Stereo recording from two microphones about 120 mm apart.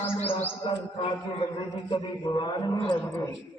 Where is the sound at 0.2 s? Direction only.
60° left (ahead or behind).